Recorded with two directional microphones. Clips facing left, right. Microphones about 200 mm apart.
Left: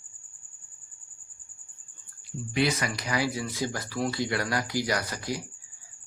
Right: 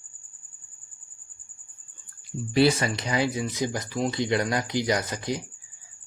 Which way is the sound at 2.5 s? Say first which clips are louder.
Right 6 dB; 30° right (ahead or behind).